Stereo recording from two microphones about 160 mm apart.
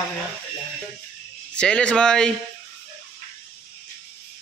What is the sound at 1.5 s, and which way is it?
Speech, 5° left (ahead or behind).